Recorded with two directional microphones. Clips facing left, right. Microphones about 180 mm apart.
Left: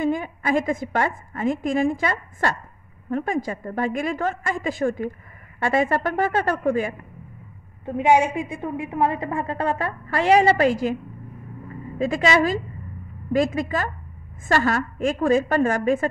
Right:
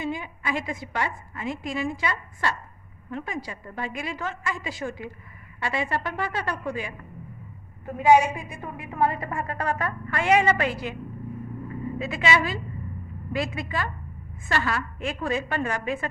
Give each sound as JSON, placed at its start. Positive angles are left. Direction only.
{"t": 0.0, "sound": "a woman's voice", "side_deg": 50}
{"t": 7.8, "sound": "a woman's voice", "side_deg": 25}
{"t": 12.0, "sound": "a woman's voice", "side_deg": 40}